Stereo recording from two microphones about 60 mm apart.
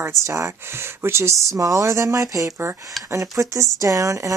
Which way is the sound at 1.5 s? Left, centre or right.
Right.